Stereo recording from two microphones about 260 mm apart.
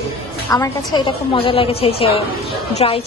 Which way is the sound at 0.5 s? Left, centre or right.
Centre.